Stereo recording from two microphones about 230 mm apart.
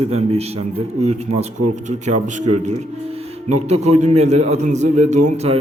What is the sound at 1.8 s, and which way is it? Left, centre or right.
A man's voice, right.